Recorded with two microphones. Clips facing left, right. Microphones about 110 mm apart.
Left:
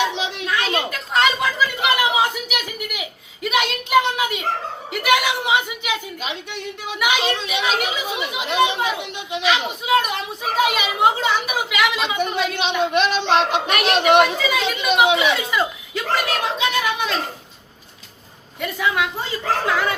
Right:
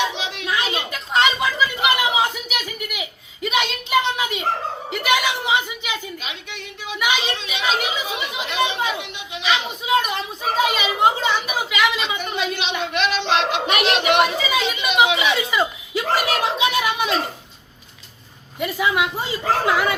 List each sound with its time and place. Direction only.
0.0 s a sound: 5° right (ahead or behind)
7.0 s a woman's voice: 5° left (ahead or behind)
12.0 s a sound: centre (ahead or behind)
12.5 s speech: 45° left (ahead or behind)
14.2 s speech: centre (ahead or behind)
18.6 s a woman's voice: 10° right (ahead or behind)